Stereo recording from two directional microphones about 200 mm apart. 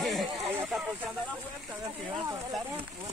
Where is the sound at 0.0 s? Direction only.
Centre (ahead or behind).